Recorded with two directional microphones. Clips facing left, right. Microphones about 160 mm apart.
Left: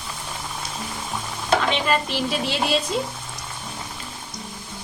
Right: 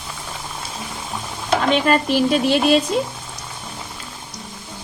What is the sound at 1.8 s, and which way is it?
Speech, 50° right (ahead or behind).